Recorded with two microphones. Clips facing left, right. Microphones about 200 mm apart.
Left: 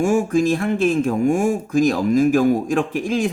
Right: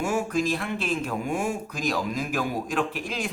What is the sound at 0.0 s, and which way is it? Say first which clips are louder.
Speech: left 8 dB; 50° left (ahead or behind).